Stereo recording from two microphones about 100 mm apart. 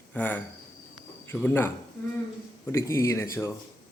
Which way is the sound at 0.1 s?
15° left (ahead or behind).